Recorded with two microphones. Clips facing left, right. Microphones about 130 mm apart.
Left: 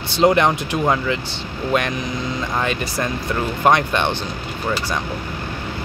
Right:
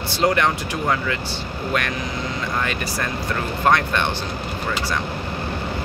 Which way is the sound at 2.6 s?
20° left (ahead or behind).